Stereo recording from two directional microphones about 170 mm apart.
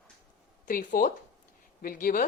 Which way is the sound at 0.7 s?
50° left (ahead or behind).